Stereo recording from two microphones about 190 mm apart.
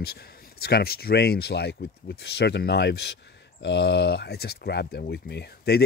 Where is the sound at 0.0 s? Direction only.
55° left (ahead or behind).